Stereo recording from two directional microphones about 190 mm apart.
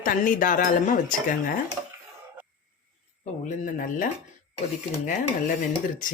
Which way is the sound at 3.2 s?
45° left (ahead or behind).